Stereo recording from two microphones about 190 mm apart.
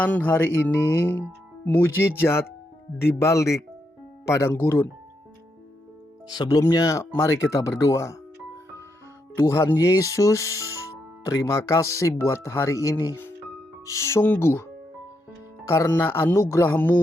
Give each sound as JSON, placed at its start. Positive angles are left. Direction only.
{"t": 0.0, "sound": "speech", "side_deg": 10}
{"t": 1.6, "sound": "speech", "side_deg": 10}
{"t": 6.3, "sound": "speech", "side_deg": 20}
{"t": 9.3, "sound": "speech", "side_deg": 15}